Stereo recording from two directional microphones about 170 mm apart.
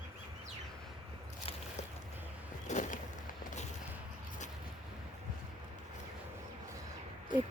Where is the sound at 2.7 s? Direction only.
50° left (ahead or behind).